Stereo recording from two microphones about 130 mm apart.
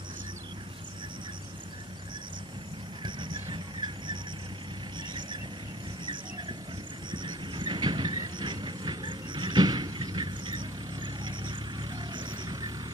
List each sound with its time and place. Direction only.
3.0 s squeal: 40° right (ahead or behind)
7.1 s train: 35° right (ahead or behind)